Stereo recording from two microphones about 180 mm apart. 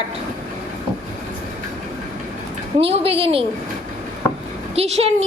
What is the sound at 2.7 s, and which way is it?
Speech, 35° right (ahead or behind).